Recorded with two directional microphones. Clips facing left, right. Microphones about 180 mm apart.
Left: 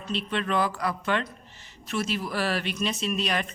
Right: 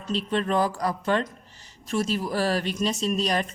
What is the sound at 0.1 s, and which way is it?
Speech, 40° right (ahead or behind).